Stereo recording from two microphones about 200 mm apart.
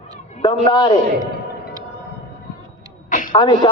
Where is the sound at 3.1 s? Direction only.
40° left (ahead or behind).